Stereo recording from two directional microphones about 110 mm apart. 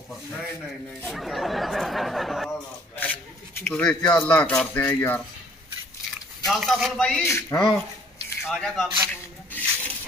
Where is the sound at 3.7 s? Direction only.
10° left (ahead or behind).